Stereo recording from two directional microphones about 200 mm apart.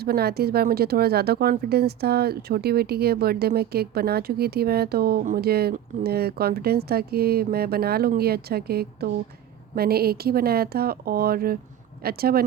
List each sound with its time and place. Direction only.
0.0 s speech: 50° right (ahead or behind)